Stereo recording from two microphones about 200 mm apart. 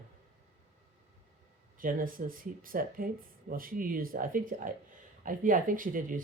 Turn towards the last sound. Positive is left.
turn(degrees=-40)  # may be behind; listen again after turning